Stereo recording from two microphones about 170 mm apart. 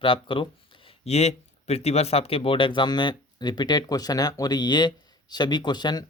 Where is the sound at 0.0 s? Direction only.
30° left (ahead or behind).